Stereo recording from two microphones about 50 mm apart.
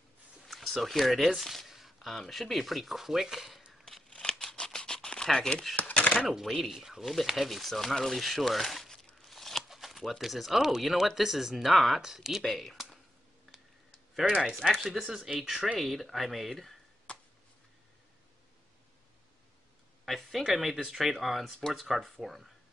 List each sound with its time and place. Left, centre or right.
0.5 s speech: centre
4.1 s scissors: centre
5.8 s chopping: left
6.2 s speech: centre
12.5 s a sound: centre
14.2 s speech: right
14.6 s speech: centre
15.0 s speech: centre
17.1 s a sound: left
20.1 s speech: centre